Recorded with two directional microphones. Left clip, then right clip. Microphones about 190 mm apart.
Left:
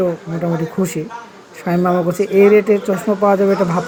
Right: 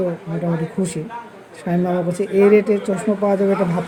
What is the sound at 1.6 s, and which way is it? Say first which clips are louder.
Speech: left 5 dB; 10° left (ahead or behind).